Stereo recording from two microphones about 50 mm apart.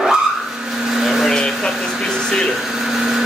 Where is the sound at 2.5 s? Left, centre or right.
Centre.